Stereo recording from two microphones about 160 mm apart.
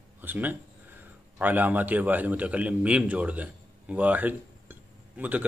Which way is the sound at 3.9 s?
10° right (ahead or behind).